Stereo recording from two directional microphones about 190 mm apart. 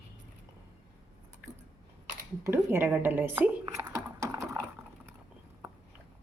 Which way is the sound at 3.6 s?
15° right (ahead or behind).